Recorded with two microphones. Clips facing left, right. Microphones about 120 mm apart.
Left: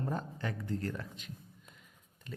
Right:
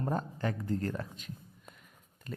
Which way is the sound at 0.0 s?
40° right (ahead or behind).